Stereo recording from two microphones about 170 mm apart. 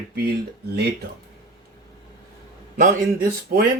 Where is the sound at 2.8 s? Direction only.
55° right (ahead or behind).